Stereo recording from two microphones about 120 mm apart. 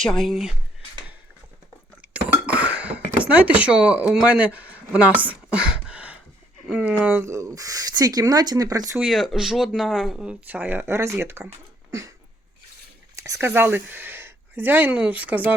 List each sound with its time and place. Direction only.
0.0 s speech: 5° left (ahead or behind)
2.0 s a sound: 10° right (ahead or behind)
6.7 s speech: 5° right (ahead or behind); by 9.0 s 30° right (ahead or behind)
9.0 s speech: 5° right (ahead or behind)
10.4 s speech: 15° right (ahead or behind)
13.1 s speech: 25° right (ahead or behind)